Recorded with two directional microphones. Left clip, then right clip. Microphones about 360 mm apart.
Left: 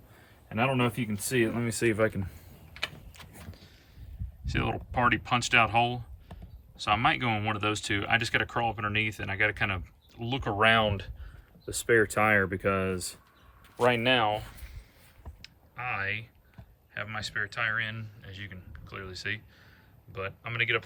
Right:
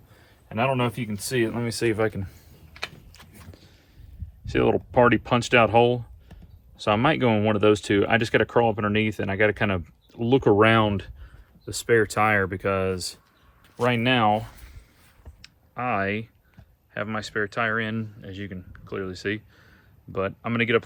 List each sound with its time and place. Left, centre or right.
0.2 s speech: centre
3.2 s vehicle: centre
4.4 s speech: centre
15.4 s typing: centre
16.9 s speech: centre